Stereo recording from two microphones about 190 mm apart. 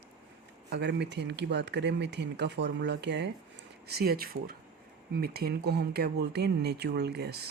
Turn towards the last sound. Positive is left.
turn(degrees=-60)  # may be behind; listen again after turning